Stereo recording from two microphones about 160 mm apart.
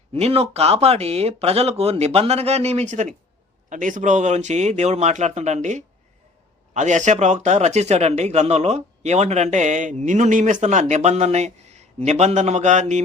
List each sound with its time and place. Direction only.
0.1 s speech: 40° right (ahead or behind)